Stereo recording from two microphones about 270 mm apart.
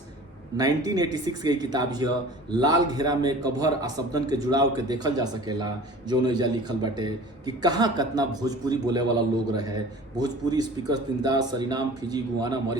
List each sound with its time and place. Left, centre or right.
0.5 s a man's voice: centre